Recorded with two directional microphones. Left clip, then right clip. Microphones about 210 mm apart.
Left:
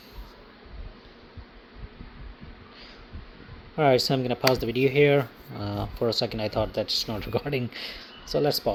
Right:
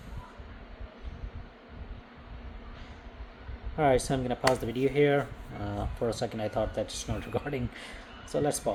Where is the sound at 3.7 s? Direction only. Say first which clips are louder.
Left 4 dB; 40° left (ahead or behind).